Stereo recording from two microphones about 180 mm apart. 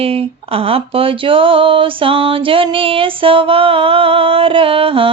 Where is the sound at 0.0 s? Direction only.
30° right (ahead or behind).